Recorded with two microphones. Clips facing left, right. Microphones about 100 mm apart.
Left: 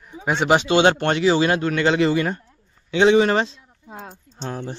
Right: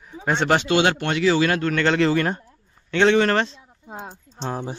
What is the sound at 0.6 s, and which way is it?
A man's voice, 25° left (ahead or behind).